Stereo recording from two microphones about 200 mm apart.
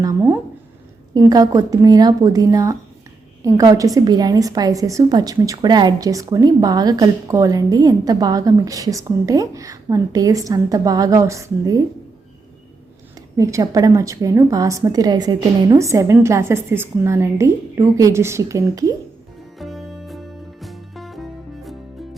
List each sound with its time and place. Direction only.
0.0 s a woman's voice: 15° right (ahead or behind)
13.3 s a woman's voice: 15° right (ahead or behind)
19.5 s music: centre (ahead or behind)